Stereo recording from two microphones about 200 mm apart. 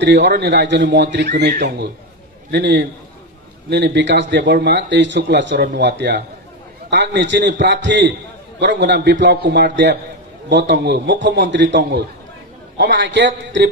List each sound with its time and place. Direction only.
0.0 s a man's voice: 60° right (ahead or behind)
2.5 s a man's voice: 60° right (ahead or behind)